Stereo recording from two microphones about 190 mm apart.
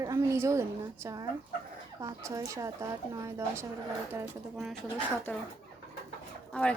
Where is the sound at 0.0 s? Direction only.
15° right (ahead or behind).